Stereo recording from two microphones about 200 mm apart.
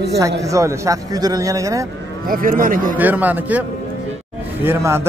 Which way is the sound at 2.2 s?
45° right (ahead or behind).